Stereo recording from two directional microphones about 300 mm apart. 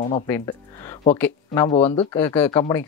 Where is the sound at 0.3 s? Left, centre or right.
Centre.